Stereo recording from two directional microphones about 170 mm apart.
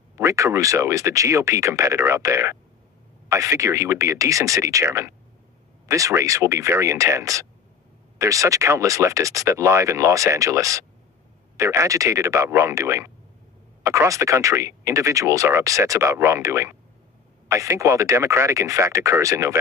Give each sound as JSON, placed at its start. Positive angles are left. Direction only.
{"t": 0.2, "sound": "speech", "side_deg": -15}